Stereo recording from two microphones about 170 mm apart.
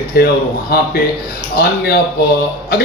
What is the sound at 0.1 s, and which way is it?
Speech, 65° left (ahead or behind).